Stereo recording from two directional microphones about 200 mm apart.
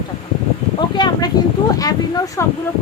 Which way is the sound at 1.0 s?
20° left (ahead or behind).